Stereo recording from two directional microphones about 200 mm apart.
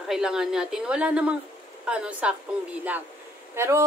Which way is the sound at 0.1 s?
5° right (ahead or behind).